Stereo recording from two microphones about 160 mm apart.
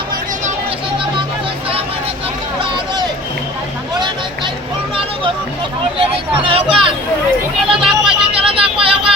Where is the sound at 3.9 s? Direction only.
30° right (ahead or behind).